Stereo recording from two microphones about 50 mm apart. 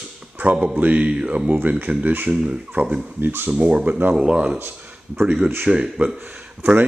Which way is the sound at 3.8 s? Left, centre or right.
Right.